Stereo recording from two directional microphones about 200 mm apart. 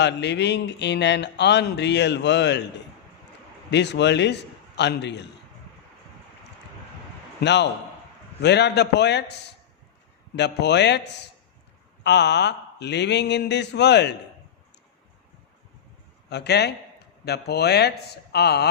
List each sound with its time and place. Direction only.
0.0 s speech: 60° left (ahead or behind)
3.7 s speech: 60° left (ahead or behind)
7.4 s speech: 60° left (ahead or behind)
16.3 s speech: 55° left (ahead or behind)